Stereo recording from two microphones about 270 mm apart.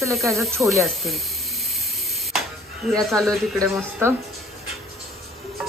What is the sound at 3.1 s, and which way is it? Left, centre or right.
Speech, centre.